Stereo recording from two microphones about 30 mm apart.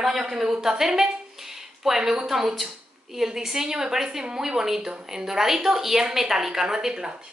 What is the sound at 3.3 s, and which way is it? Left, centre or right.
A woman's voice, centre.